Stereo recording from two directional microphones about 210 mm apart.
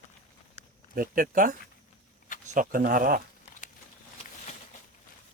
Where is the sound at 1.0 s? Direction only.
40° right (ahead or behind).